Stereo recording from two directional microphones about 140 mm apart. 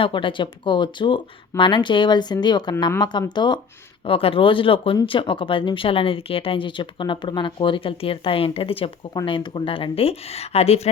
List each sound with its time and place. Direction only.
0.0 s speech: 35° left (ahead or behind)